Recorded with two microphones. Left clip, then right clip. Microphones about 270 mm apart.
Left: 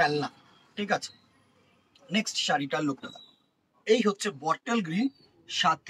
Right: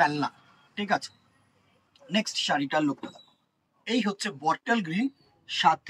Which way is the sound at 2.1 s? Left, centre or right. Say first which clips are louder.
Right 1 dB; centre.